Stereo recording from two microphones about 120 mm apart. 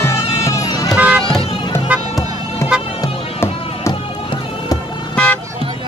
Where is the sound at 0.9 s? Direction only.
10° right (ahead or behind).